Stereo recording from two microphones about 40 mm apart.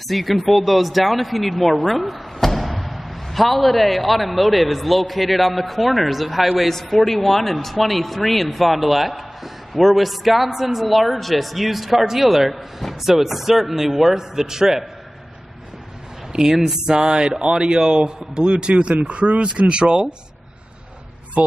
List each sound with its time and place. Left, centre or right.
0.1 s speech: centre
16.3 s speech: centre
21.4 s speech: right